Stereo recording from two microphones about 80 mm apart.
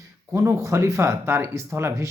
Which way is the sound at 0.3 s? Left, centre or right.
Right.